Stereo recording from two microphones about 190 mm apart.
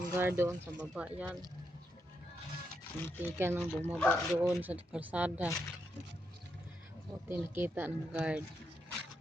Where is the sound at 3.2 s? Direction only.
10° right (ahead or behind).